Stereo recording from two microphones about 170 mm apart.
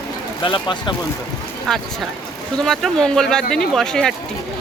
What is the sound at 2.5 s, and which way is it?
Speech, centre (ahead or behind).